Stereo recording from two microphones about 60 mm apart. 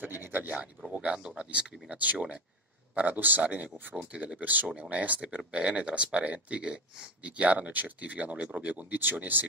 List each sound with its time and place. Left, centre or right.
0.0 s speech: right
0.9 s speech: centre